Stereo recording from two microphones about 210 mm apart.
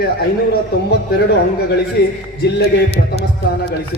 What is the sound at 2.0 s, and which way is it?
Speech, 50° left (ahead or behind).